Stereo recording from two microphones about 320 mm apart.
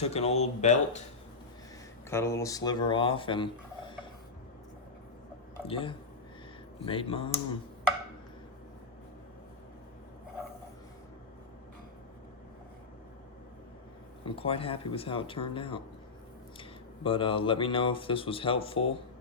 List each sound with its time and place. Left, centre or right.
0.0 s speech: centre
2.0 s speech: centre
5.6 s speech: centre
14.3 s speech: centre